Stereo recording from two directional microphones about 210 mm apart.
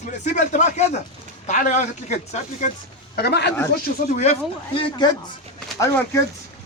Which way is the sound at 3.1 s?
50° left (ahead or behind).